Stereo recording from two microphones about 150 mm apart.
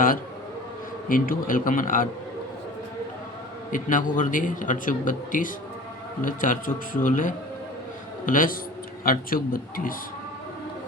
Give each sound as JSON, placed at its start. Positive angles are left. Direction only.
{"t": 1.0, "sound": "a man's voice", "side_deg": 70}
{"t": 3.7, "sound": "a man's voice", "side_deg": 60}